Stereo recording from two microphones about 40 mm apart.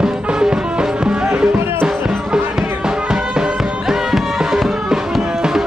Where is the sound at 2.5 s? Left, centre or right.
Right.